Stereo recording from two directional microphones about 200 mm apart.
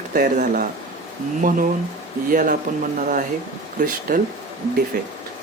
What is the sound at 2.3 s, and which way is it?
Speech, 45° right (ahead or behind).